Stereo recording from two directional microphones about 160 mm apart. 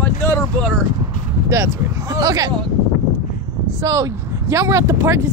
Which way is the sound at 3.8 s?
20° right (ahead or behind).